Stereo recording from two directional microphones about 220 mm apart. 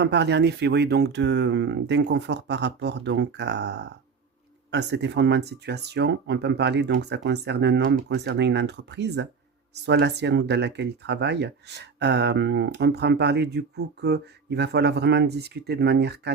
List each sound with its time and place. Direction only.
0.0 s speech: 50° right (ahead or behind)